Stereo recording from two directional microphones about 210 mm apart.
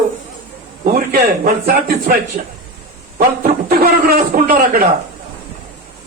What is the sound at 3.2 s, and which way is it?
Speech, 45° right (ahead or behind).